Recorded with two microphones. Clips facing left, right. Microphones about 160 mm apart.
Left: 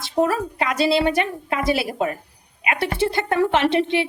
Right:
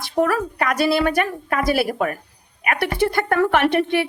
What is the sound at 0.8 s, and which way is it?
A woman's voice, 25° left (ahead or behind).